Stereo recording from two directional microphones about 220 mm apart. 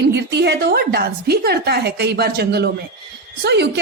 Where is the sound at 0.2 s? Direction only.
50° right (ahead or behind).